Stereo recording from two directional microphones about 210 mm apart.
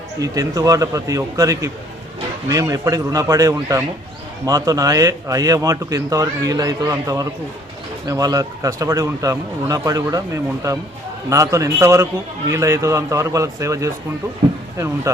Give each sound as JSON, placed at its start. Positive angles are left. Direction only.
{"t": 0.2, "sound": "a man's voice", "side_deg": -15}
{"t": 15.1, "sound": "a man's voice", "side_deg": -15}